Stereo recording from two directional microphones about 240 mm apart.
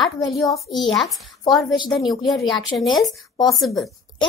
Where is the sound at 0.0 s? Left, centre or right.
Centre.